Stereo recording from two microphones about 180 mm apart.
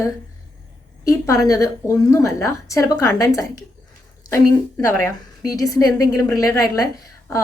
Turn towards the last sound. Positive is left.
turn(degrees=20)  # may be behind; listen again after turning